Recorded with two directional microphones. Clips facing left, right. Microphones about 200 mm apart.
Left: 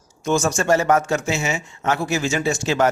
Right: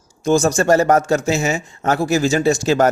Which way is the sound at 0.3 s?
35° right (ahead or behind).